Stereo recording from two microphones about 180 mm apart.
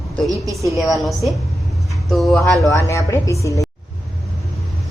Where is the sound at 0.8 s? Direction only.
Centre (ahead or behind).